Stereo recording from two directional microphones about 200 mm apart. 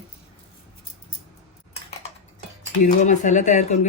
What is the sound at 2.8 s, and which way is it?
Speech, 35° left (ahead or behind).